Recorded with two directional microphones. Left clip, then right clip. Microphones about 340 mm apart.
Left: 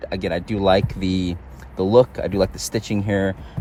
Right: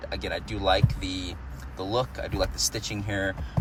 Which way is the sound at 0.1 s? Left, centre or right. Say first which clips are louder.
Left 8 dB; left.